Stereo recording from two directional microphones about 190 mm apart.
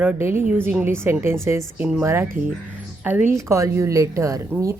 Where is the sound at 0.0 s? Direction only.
10° right (ahead or behind).